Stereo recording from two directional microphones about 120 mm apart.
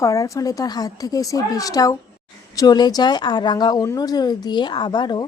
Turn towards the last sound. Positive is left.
turn(degrees=35)  # may be behind; listen again after turning